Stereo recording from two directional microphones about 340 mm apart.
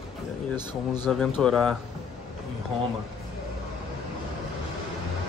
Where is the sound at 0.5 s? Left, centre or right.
Centre.